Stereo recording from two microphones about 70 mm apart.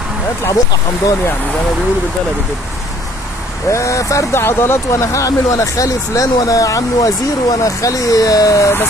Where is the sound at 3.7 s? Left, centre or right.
Left.